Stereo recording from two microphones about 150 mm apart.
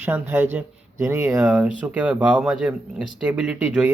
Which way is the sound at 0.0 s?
15° right (ahead or behind).